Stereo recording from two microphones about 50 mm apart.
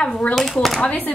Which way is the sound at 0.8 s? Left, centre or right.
Left.